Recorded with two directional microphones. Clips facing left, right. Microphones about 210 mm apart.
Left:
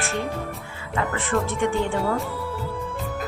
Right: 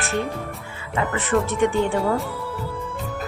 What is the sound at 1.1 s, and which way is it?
Speech, 20° right (ahead or behind).